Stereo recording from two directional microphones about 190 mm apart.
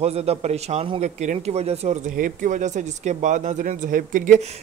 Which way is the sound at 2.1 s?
45° right (ahead or behind).